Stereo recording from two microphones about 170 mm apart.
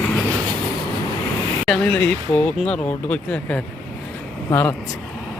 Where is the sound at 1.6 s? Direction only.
5° left (ahead or behind).